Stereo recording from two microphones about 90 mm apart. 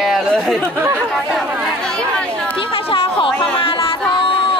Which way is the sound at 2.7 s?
75° left (ahead or behind).